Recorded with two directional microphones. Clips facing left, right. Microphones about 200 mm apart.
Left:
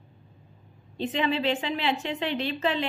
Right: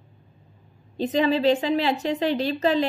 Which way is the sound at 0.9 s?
40° right (ahead or behind).